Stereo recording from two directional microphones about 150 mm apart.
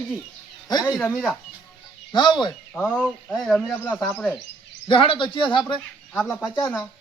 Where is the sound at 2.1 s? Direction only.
30° left (ahead or behind).